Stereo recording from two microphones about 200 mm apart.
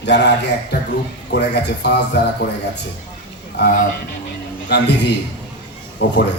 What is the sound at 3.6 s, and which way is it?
Speech, 55° left (ahead or behind).